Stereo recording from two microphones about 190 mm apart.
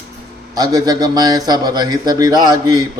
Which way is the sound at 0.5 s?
20° right (ahead or behind).